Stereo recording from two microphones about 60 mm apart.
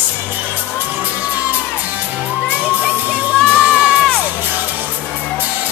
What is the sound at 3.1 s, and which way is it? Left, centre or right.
Music, centre.